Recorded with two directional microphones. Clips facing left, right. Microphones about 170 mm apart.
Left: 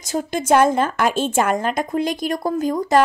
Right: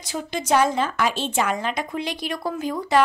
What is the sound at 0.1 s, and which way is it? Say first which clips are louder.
A woman's voice: left 5 dB; 50° left (ahead or behind).